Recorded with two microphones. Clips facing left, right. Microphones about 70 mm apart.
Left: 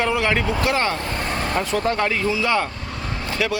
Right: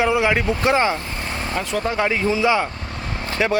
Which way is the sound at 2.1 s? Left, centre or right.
Right.